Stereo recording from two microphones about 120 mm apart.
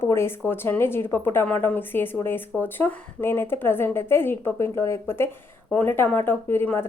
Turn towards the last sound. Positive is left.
turn(degrees=20)  # may be behind; listen again after turning